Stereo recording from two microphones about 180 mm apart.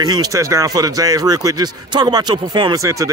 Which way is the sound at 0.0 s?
20° right (ahead or behind).